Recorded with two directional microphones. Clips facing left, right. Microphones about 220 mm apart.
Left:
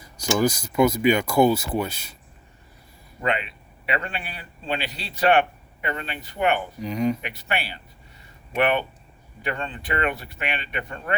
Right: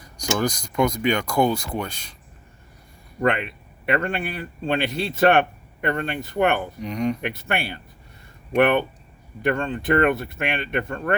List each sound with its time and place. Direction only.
0.0 s speech: 5° left (ahead or behind)
3.2 s a man's voice: 50° right (ahead or behind)
6.7 s speech: centre (ahead or behind)
7.2 s a man's voice: 50° right (ahead or behind)